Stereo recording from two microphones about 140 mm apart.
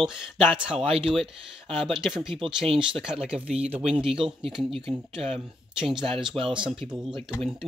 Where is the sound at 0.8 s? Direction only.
40° right (ahead or behind).